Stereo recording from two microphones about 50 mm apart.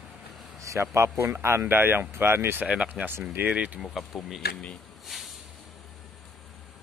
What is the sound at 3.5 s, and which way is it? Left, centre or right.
Speech, right.